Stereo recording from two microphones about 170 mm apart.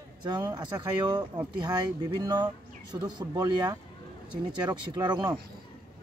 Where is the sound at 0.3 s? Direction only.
25° right (ahead or behind).